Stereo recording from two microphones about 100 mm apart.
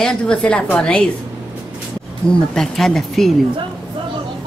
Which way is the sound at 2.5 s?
5° left (ahead or behind).